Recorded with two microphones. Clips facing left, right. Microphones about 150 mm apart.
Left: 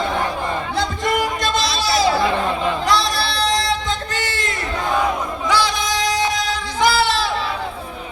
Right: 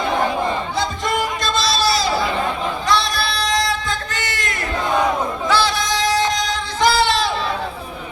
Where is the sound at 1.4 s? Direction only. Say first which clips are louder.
Right 1 dB; 15° left (ahead or behind).